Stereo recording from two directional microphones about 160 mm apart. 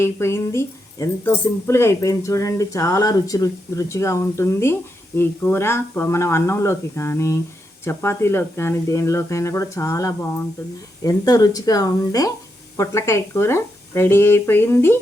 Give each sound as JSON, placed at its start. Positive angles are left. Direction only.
{"t": 0.0, "sound": "speech", "side_deg": 15}